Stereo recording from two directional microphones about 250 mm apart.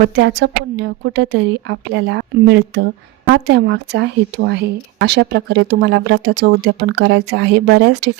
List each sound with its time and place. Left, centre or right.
0.2 s speech: right